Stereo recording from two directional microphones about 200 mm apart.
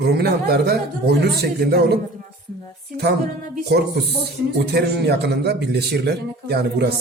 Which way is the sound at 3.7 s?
50° right (ahead or behind).